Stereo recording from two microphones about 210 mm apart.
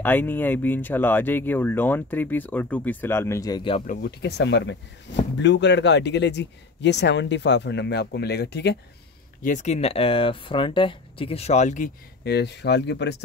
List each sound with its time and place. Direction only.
0.0 s speech: 10° left (ahead or behind)
3.8 s speech: 40° left (ahead or behind)
4.2 s speech: 55° left (ahead or behind)
9.4 s speech: 35° left (ahead or behind)
12.3 s speech: 55° left (ahead or behind)